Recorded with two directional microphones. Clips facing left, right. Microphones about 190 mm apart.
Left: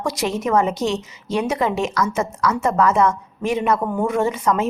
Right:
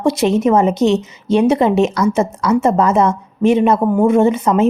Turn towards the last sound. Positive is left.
turn(degrees=-25)  # may be behind; listen again after turning